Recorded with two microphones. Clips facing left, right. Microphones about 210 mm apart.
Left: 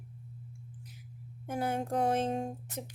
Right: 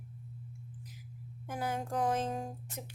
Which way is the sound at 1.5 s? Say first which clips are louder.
Left 4 dB; 30° left (ahead or behind).